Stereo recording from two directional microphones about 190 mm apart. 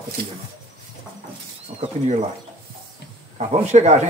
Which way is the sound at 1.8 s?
35° right (ahead or behind).